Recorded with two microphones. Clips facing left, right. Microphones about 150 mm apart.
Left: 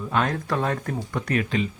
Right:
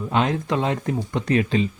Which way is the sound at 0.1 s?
20° right (ahead or behind).